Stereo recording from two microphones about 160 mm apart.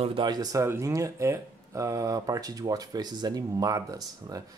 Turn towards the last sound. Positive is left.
turn(degrees=-20)  # may be behind; listen again after turning